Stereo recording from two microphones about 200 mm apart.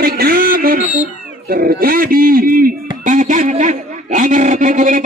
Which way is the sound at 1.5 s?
45° right (ahead or behind).